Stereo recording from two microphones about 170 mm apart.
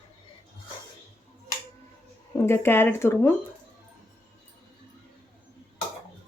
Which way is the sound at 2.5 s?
15° left (ahead or behind).